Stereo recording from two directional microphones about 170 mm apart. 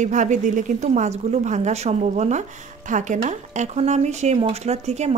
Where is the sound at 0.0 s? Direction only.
45° right (ahead or behind).